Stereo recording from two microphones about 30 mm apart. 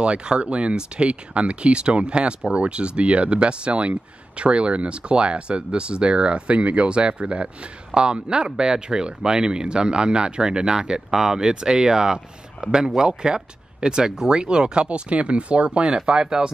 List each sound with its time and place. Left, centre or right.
0.0 s speech: right
16.1 s speech: right